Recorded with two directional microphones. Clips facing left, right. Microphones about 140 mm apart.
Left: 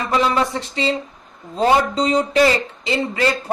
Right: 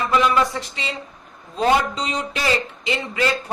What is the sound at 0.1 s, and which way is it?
Speech, 30° left (ahead or behind).